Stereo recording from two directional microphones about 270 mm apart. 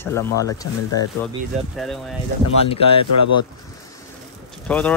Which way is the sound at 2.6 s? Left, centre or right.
Left.